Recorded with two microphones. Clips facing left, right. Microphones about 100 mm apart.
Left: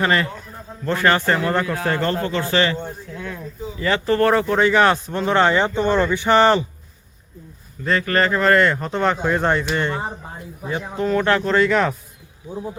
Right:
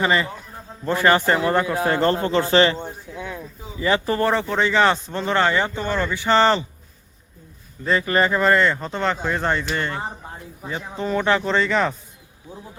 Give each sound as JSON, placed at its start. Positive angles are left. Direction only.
{"t": 0.0, "sound": "a man's voice", "side_deg": -5}
{"t": 2.0, "sound": "a man's voice", "side_deg": -30}
{"t": 2.8, "sound": "a sound", "side_deg": -10}
{"t": 4.3, "sound": "speech", "side_deg": 0}
{"t": 8.0, "sound": "speech", "side_deg": -10}